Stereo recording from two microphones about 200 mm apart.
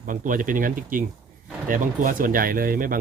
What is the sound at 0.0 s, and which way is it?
Speech, 40° right (ahead or behind).